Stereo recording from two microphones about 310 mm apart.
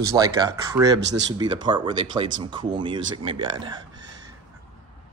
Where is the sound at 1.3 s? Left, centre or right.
Centre.